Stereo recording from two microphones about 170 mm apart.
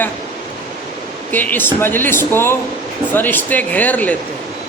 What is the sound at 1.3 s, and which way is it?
Speech, 10° left (ahead or behind).